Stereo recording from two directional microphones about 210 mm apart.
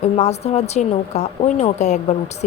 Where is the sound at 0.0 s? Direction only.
30° left (ahead or behind).